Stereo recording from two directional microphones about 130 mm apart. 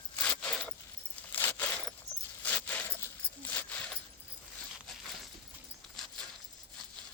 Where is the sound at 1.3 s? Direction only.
15° left (ahead or behind).